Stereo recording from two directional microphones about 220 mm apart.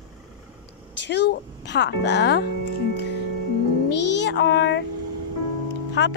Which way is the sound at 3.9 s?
50° left (ahead or behind).